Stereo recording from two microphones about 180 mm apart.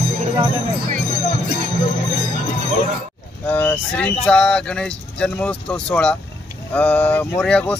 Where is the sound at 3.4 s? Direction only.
10° left (ahead or behind).